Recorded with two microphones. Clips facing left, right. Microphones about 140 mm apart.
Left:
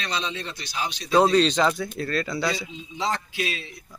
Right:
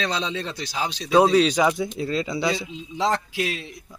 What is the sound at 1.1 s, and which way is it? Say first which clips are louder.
A man's voice: right 2 dB; 5° right (ahead or behind).